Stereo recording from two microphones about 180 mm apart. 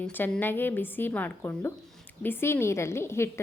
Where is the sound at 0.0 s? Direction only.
10° left (ahead or behind).